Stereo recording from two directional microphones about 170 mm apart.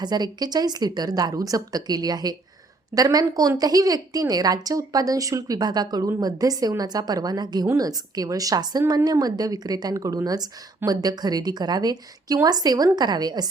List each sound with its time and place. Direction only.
0.0 s a woman's voice: 25° right (ahead or behind)